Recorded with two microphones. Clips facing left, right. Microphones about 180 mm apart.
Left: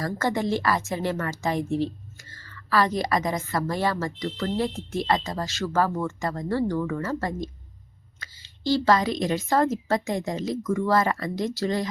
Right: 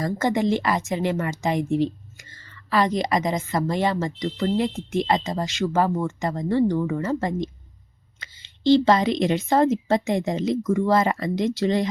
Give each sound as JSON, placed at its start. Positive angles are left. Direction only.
{"t": 0.0, "sound": "a woman's voice", "side_deg": -20}